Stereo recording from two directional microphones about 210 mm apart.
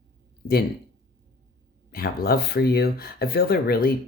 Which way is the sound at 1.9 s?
45° left (ahead or behind).